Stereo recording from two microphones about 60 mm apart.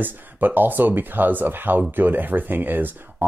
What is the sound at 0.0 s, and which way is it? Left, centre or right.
Speech, right.